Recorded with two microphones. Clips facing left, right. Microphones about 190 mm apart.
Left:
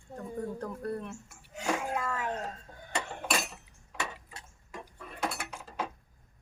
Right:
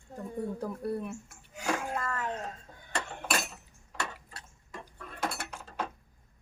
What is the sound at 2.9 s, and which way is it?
Cutlery, centre (ahead or behind).